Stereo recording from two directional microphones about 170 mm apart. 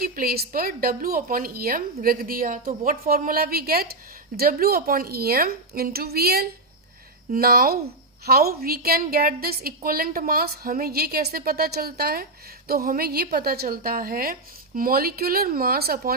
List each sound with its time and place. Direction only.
0.0 s a woman's voice: 60° right (ahead or behind)